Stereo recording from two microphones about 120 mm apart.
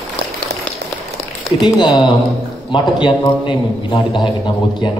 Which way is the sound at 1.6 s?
35° left (ahead or behind).